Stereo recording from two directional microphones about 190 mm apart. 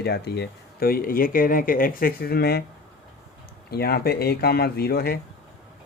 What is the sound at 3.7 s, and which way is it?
Speech, 55° left (ahead or behind).